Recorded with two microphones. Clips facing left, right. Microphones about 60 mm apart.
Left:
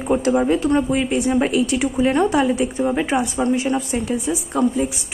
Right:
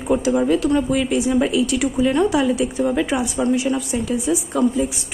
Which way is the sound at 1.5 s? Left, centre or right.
Left.